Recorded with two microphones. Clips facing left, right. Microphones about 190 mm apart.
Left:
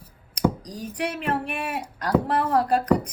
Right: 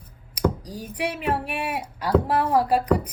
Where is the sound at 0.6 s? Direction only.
5° right (ahead or behind).